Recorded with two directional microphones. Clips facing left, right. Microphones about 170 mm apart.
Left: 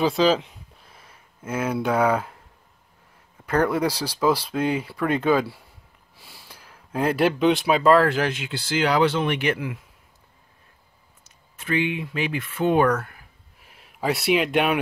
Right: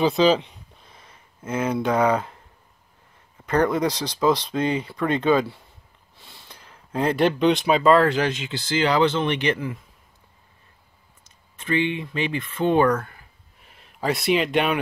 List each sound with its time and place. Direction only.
0.0 s speech: 5° left (ahead or behind)
3.4 s speech: 5° left (ahead or behind)
11.2 s speech: 5° left (ahead or behind)